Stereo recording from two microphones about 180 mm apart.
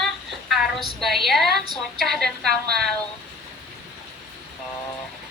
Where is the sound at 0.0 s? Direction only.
Centre (ahead or behind).